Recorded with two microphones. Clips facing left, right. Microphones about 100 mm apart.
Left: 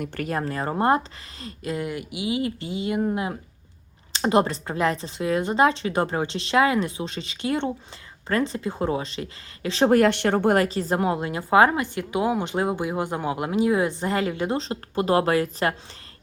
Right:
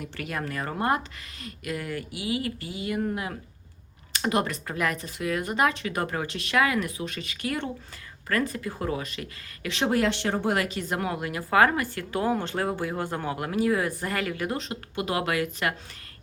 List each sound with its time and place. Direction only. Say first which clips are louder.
0.0 s speech: left 7 dB; 45° left (ahead or behind)
0.3 s a woman's voice: left 4 dB; 30° left (ahead or behind)
9.9 s speech: left 6 dB; 55° left (ahead or behind)
10.6 s a woman's voice: left 6 dB; 35° left (ahead or behind)